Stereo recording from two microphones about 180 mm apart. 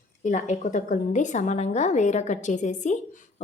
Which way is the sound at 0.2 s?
40° left (ahead or behind).